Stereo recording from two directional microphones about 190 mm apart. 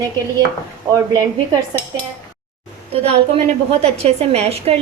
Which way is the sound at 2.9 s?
30° right (ahead or behind).